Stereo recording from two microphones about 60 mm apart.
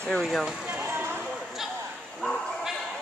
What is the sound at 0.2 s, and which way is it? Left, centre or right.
Speech, centre.